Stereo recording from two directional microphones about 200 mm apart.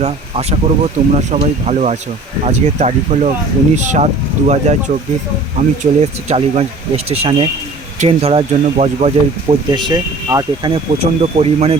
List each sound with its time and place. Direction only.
0.0 s speech: 35° right (ahead or behind)
5.8 s speech: 35° right (ahead or behind)